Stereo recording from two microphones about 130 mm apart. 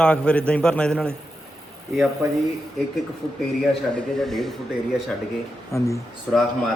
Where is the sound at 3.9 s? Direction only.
5° left (ahead or behind).